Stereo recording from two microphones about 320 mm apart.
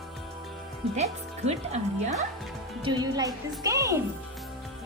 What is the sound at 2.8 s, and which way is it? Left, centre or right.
Speech, centre.